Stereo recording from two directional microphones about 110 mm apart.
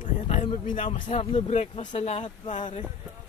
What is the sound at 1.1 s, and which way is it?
Speech, 75° left (ahead or behind).